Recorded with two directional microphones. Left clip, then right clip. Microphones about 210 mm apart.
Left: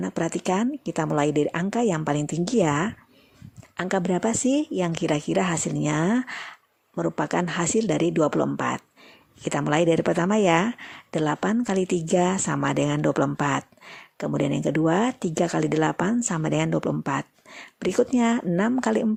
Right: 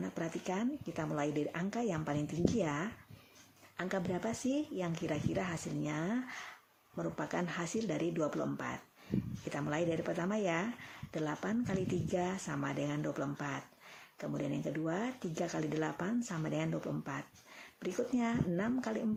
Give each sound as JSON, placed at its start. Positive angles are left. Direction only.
{"t": 0.0, "sound": "speech", "side_deg": 45}